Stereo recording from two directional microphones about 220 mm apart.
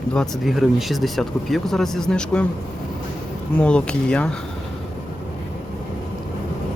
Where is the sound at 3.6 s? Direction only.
5° left (ahead or behind).